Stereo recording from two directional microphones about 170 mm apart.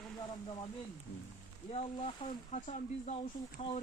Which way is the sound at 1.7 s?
35° left (ahead or behind).